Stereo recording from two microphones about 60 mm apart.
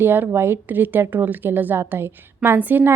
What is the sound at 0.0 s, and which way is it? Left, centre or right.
A woman's voice, right.